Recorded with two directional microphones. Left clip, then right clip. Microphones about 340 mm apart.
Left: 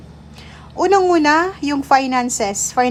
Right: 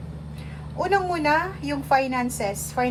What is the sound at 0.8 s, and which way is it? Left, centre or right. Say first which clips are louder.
A woman's voice: left 9 dB; centre.